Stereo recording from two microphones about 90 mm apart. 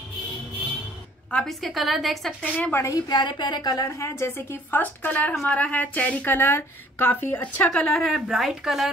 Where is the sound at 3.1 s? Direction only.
55° left (ahead or behind); by 7.8 s 15° left (ahead or behind).